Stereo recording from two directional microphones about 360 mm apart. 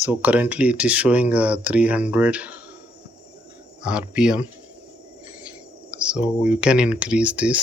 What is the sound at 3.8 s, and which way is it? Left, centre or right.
Speech, centre.